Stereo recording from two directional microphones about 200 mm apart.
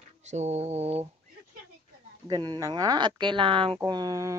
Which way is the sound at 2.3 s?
20° right (ahead or behind).